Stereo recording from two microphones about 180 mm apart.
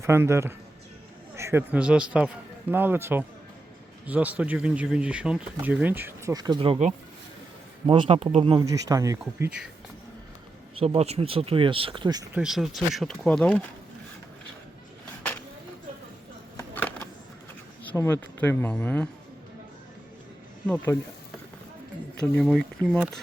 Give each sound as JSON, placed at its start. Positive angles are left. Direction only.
{"t": 0.0, "sound": "a man's voice", "side_deg": -15}
{"t": 8.6, "sound": "speech", "side_deg": -20}
{"t": 10.8, "sound": "speech", "side_deg": -35}
{"t": 12.3, "sound": "speech", "side_deg": -5}
{"t": 16.6, "sound": "a sound", "side_deg": 10}
{"t": 17.9, "sound": "speech", "side_deg": 10}
{"t": 20.7, "sound": "speech", "side_deg": 10}
{"t": 22.2, "sound": "speech", "side_deg": 0}